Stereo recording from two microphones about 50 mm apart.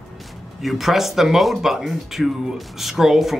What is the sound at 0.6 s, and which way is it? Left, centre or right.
Speech, centre.